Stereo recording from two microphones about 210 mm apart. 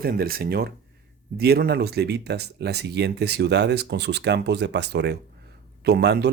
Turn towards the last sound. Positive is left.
turn(degrees=-50)  # may be behind; listen again after turning